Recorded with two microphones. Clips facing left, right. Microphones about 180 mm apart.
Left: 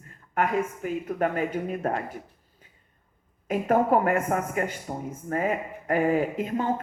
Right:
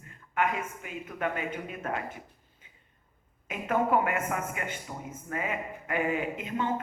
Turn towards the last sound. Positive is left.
turn(degrees=40)  # may be behind; listen again after turning